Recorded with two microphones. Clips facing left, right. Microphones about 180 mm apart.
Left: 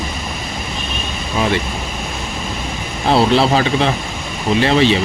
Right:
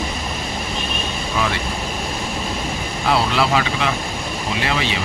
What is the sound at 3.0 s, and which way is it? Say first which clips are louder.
Speech: left 6 dB; 30° left (ahead or behind).